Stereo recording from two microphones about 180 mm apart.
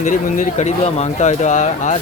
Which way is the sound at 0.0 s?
45° left (ahead or behind).